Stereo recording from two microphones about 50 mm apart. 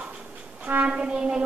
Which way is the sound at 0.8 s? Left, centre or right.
Right.